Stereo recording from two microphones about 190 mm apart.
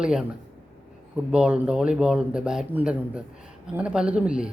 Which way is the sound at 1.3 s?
5° right (ahead or behind).